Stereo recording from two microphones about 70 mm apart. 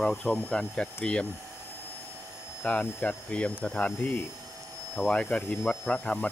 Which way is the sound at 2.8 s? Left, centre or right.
Left.